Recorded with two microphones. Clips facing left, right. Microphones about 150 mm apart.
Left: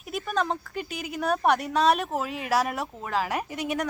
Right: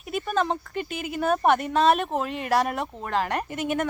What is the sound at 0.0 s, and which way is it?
A woman's voice, centre (ahead or behind).